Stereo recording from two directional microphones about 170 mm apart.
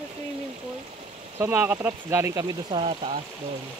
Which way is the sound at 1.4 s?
10° right (ahead or behind).